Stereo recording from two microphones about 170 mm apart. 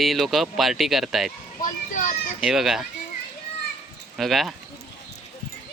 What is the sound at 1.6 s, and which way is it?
Children playing, 50° left (ahead or behind).